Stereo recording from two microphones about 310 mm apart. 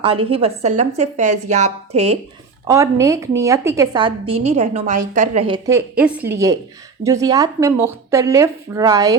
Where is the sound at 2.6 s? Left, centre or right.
Centre.